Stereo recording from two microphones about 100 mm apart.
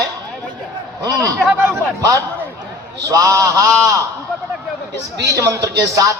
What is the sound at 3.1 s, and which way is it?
Music, 35° right (ahead or behind).